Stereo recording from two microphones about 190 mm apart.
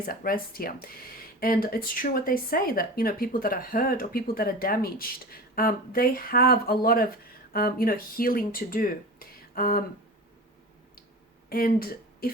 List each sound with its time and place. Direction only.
0.0 s speech: 50° left (ahead or behind)
11.4 s speech: 50° left (ahead or behind)